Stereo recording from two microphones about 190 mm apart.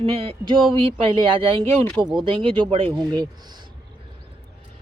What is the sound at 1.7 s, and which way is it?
Speech, 10° left (ahead or behind).